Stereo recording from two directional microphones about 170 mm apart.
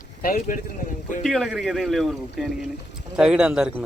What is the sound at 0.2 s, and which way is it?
Speech, 55° left (ahead or behind).